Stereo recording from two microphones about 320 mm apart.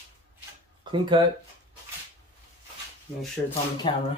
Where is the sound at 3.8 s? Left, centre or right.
Centre.